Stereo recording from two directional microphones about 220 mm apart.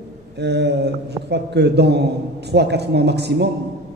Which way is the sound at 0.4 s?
50° right (ahead or behind).